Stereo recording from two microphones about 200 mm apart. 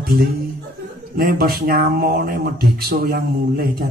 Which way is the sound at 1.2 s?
45° right (ahead or behind).